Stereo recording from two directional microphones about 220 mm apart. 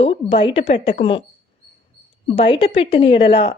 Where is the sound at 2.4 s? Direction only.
25° left (ahead or behind).